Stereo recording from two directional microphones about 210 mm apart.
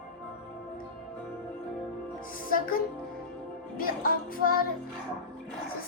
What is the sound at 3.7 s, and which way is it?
Speech, 45° left (ahead or behind).